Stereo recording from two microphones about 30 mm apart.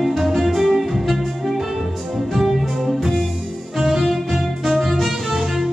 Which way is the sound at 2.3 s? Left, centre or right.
Centre.